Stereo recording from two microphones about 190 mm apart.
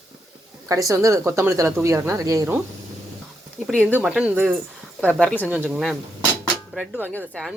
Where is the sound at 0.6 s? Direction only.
15° right (ahead or behind).